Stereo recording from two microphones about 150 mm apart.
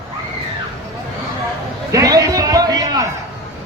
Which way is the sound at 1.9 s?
25° right (ahead or behind).